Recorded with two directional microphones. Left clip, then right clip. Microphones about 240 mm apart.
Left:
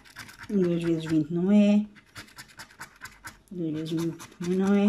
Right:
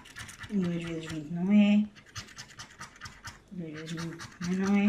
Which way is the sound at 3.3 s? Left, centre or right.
Left.